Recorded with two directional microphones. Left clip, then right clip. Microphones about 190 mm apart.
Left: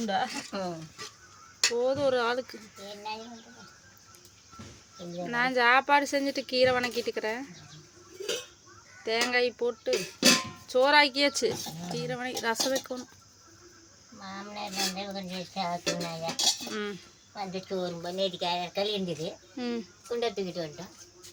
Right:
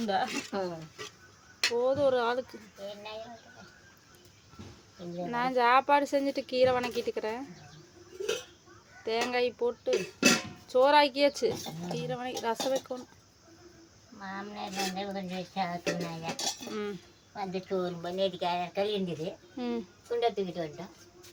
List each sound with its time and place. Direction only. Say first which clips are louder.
0.0 s speech: left 1 dB; 5° left (ahead or behind)
0.5 s speech: even; 25° right (ahead or behind)
1.7 s speech: right 1 dB; centre (ahead or behind)
5.1 s speech: left 2 dB; centre (ahead or behind)
9.0 s speech: left 3 dB; centre (ahead or behind)
14.2 s speech: even; 10° right (ahead or behind)
17.3 s speech: right 1 dB; 15° right (ahead or behind)
19.5 s speech: even; centre (ahead or behind)
20.1 s speech: right 1 dB; 15° right (ahead or behind)